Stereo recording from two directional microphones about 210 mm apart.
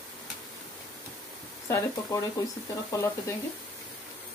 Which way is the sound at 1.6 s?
15° left (ahead or behind).